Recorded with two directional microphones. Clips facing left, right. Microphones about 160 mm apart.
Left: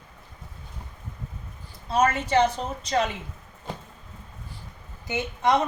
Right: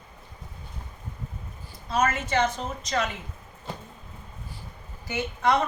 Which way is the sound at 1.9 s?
30° left (ahead or behind).